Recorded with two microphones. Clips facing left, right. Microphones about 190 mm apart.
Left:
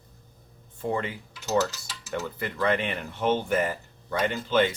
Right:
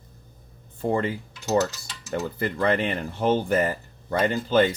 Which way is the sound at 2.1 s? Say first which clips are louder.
Right 4 dB; 35° right (ahead or behind).